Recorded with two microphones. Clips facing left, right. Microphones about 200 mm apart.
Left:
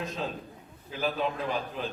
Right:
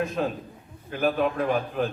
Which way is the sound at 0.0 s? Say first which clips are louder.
Right 7 dB; 55° right (ahead or behind).